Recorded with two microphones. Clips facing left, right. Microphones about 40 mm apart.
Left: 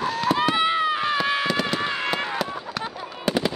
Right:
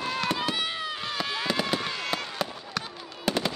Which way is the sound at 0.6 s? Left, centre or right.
Left.